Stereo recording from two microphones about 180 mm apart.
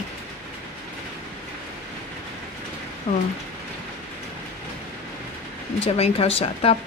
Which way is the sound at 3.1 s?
35° left (ahead or behind).